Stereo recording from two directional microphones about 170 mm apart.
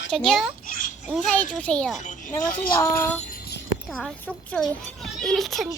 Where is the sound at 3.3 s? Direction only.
65° left (ahead or behind).